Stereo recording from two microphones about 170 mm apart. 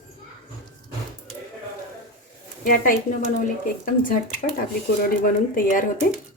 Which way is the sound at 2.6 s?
55° left (ahead or behind).